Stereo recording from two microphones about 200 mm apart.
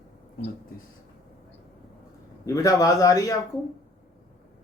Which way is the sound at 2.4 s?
15° left (ahead or behind).